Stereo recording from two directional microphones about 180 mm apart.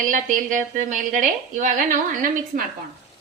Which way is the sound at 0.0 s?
45° right (ahead or behind).